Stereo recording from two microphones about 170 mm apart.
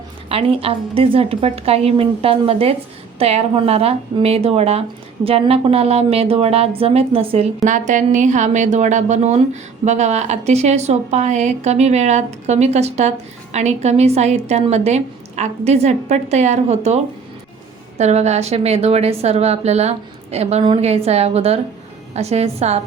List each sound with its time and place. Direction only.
0.3 s a woman's voice: 35° right (ahead or behind)